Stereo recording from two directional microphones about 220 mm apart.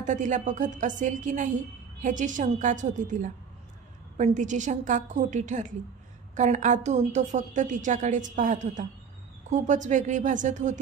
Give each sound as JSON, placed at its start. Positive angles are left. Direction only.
{"t": 0.0, "sound": "a woman's voice", "side_deg": -35}